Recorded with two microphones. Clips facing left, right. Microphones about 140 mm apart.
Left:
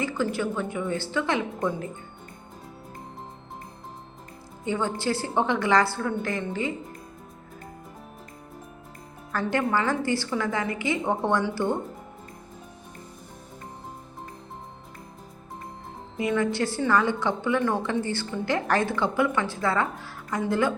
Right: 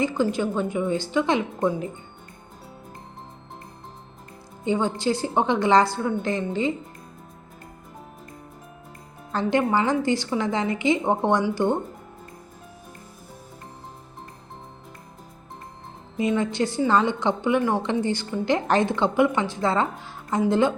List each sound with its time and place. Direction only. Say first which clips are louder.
0.0 s a woman's voice: right 4 dB; 20° right (ahead or behind)
4.6 s a woman's voice: right 4 dB; 20° right (ahead or behind)
9.3 s a woman's voice: right 3 dB; 20° right (ahead or behind)
16.1 s a woman's voice: right 2 dB; 20° right (ahead or behind)